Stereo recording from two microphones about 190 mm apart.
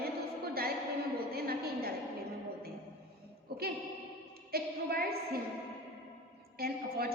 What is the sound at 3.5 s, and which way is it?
Music, 55° right (ahead or behind).